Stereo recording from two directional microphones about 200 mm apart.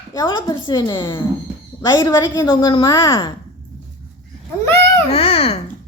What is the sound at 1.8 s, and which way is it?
A woman's voice, 20° left (ahead or behind).